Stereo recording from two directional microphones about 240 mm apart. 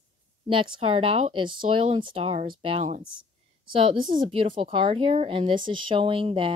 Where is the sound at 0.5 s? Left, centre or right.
Right.